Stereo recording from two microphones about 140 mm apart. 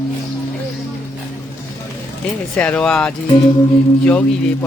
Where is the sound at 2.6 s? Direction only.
10° left (ahead or behind).